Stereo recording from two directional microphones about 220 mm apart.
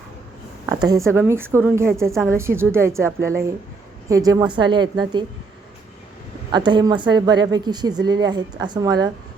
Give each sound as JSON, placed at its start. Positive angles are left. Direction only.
{"t": 0.7, "sound": "a woman's voice", "side_deg": -15}
{"t": 6.5, "sound": "speech", "side_deg": -20}